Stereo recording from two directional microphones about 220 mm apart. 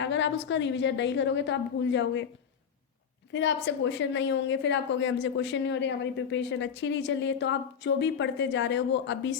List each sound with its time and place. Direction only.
0.0 s a woman's voice: 55° left (ahead or behind)
3.3 s a woman's voice: 55° left (ahead or behind)